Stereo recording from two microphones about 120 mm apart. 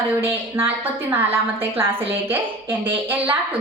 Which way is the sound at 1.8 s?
15° right (ahead or behind).